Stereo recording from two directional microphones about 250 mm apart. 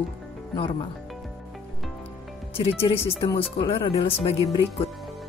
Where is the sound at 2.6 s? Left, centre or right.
Left.